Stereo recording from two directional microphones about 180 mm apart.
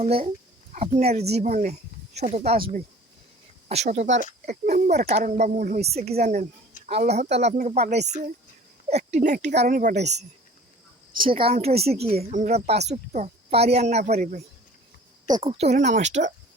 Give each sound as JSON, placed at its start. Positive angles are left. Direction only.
{"t": 0.0, "sound": "speech", "side_deg": -35}
{"t": 11.2, "sound": "speech", "side_deg": -30}
{"t": 15.3, "sound": "speech", "side_deg": -30}